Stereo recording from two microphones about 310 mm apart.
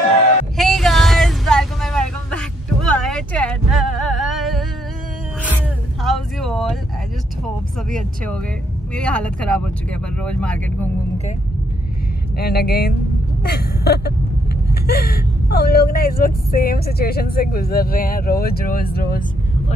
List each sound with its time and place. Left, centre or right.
0.6 s vehicle: centre
6.0 s a sound: centre
7.4 s speech: centre
12.4 s speech: left
13.4 s vehicle: left
14.7 s speech: left